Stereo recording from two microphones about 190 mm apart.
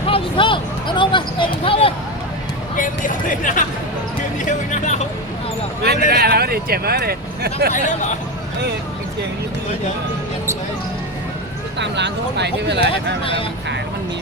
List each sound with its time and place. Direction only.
0.0 s speech: 30° left (ahead or behind)
2.7 s speech: 45° left (ahead or behind)
5.8 s speech: 55° right (ahead or behind)
7.7 s speech: 40° left (ahead or behind)
11.8 s speech: 65° right (ahead or behind)